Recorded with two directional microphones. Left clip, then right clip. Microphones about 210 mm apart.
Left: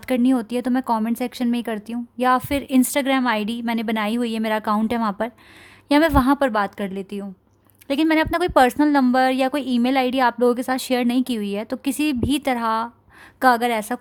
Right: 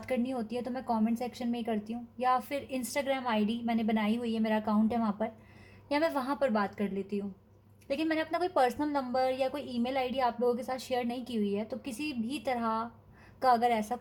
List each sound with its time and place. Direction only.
0.0 s a woman's voice: 55° left (ahead or behind)